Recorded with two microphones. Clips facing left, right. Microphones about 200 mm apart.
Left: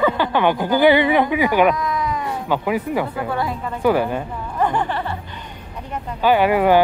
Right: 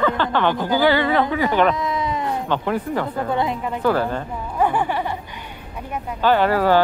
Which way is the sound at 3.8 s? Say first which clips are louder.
Left 3 dB; 15° left (ahead or behind).